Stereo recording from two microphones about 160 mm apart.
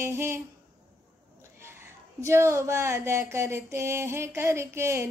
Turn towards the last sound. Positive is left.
turn(degrees=-15)  # may be behind; listen again after turning